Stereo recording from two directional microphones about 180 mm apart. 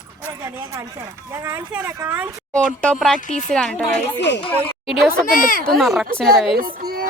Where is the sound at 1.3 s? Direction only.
15° right (ahead or behind).